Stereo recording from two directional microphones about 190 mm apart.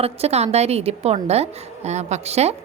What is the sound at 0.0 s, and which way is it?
A woman's voice, 35° right (ahead or behind).